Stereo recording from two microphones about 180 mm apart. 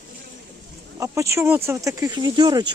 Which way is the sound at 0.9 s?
15° right (ahead or behind).